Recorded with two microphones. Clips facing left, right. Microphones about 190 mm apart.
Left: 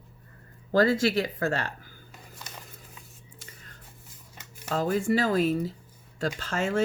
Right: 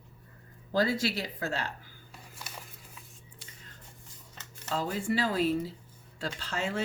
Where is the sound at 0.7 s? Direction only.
50° left (ahead or behind).